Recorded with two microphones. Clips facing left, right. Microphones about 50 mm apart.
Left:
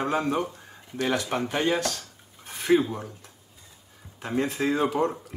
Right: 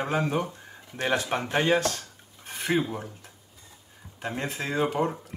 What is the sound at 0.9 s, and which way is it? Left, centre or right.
Speech, right.